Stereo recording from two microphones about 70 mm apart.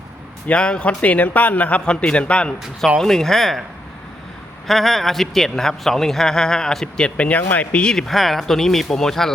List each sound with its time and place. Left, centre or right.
0.4 s a man's voice: centre
4.6 s a man's voice: centre